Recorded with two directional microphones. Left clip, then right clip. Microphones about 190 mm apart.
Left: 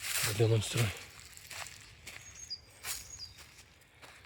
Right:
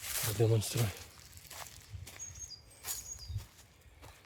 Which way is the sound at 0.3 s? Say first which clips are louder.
Right 1 dB; centre (ahead or behind).